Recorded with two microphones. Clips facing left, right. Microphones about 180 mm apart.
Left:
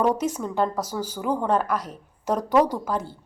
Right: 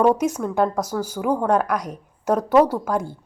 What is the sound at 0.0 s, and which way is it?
A woman's voice, 10° right (ahead or behind).